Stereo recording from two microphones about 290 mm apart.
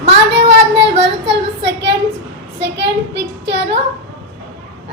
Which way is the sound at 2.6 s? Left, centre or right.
Right.